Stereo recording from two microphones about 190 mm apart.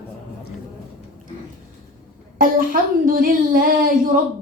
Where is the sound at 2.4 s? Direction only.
45° right (ahead or behind).